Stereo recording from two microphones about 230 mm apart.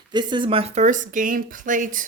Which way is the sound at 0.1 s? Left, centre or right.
Centre.